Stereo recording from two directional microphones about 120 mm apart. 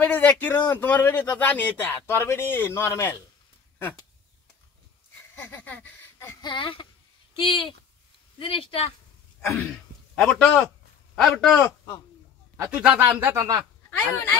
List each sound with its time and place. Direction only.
0.0 s speech: 10° left (ahead or behind)
5.3 s a sound: 15° left (ahead or behind)
6.4 s speech: 40° left (ahead or behind)
9.4 s a sound: 5° left (ahead or behind)
10.1 s speech: 5° left (ahead or behind)
12.7 s speech: 10° right (ahead or behind); by 13.7 s 25° right (ahead or behind)
13.8 s speech: 20° left (ahead or behind)